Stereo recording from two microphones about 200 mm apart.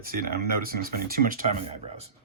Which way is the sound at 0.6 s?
45° right (ahead or behind).